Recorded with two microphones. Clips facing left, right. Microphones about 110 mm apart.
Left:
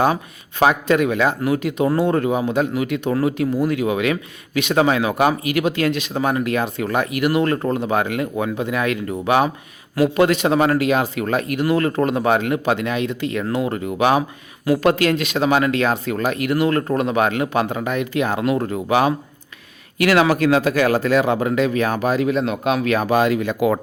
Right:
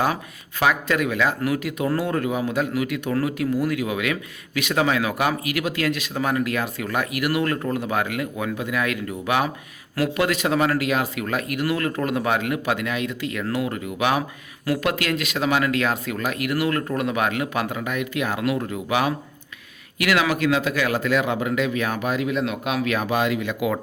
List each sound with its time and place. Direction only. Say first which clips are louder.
0.6 s speech: left 5 dB; 25° left (ahead or behind)
3.7 s speech: left 5 dB; 30° left (ahead or behind)
14.2 s speech: left 4 dB; 20° left (ahead or behind); by 23.8 s 40° left (ahead or behind)